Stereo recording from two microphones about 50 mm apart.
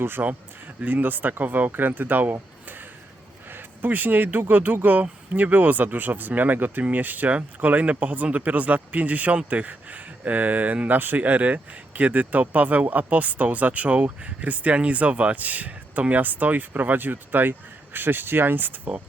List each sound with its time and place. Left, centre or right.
0.0 s speech: right
0.9 s speech: right
3.5 s speech: right